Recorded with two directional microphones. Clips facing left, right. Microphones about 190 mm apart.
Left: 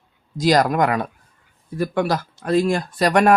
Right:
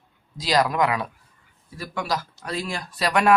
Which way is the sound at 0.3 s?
50° left (ahead or behind).